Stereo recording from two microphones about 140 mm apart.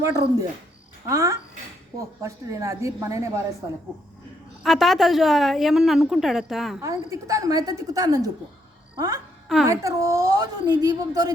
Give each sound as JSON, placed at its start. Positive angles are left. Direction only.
{"t": 0.0, "sound": "a woman's voice", "side_deg": -25}
{"t": 4.6, "sound": "a woman's voice", "side_deg": 0}
{"t": 6.8, "sound": "a woman's voice", "side_deg": -25}